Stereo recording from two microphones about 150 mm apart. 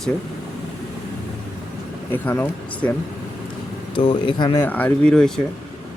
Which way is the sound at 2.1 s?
15° left (ahead or behind).